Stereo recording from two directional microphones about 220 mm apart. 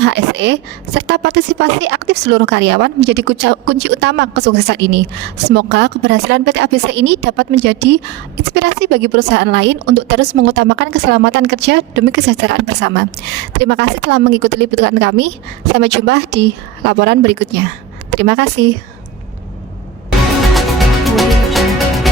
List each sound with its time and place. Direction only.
0.0 s a woman's voice: 50° right (ahead or behind)
20.5 s music: centre (ahead or behind)